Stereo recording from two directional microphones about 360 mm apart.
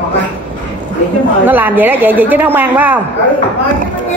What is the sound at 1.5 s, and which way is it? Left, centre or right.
A man's voice, centre.